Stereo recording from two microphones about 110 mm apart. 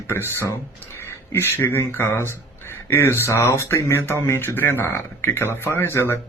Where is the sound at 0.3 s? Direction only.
20° left (ahead or behind).